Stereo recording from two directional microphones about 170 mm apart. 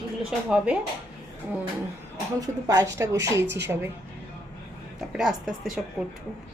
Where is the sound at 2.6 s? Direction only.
20° right (ahead or behind).